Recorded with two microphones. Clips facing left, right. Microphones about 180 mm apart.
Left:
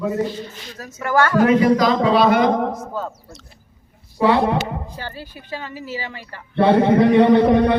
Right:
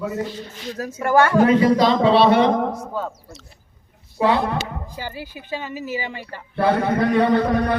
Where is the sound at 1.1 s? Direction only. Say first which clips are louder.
Even; 25° right (ahead or behind).